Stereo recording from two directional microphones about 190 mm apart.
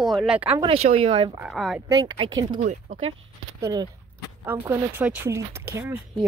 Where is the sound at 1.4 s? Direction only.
Centre (ahead or behind).